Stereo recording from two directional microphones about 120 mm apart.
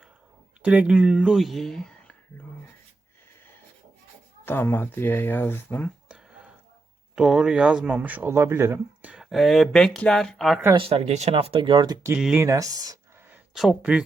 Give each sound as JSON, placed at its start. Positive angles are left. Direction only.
{"t": 0.6, "sound": "speech", "side_deg": -10}
{"t": 4.4, "sound": "speech", "side_deg": 20}
{"t": 6.1, "sound": "a sound", "side_deg": -10}
{"t": 7.2, "sound": "speech", "side_deg": -5}
{"t": 9.3, "sound": "speech", "side_deg": 0}
{"t": 10.8, "sound": "speech", "side_deg": -55}
{"t": 12.1, "sound": "speech", "side_deg": -10}
{"t": 12.4, "sound": "speech", "side_deg": -25}
{"t": 13.3, "sound": "speech", "side_deg": -5}